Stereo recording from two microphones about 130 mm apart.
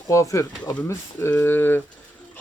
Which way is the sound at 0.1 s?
25° left (ahead or behind).